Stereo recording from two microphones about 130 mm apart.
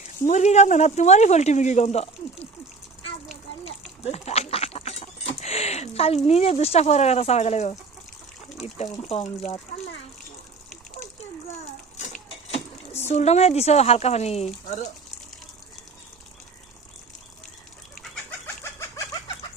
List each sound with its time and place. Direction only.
0.3 s speech: 60° left (ahead or behind)
4.0 s a sound: 55° left (ahead or behind)
6.2 s speech: 55° left (ahead or behind)
13.1 s speech: 60° left (ahead or behind)
17.9 s chicken: 5° left (ahead or behind); by 19.5 s 25° left (ahead or behind)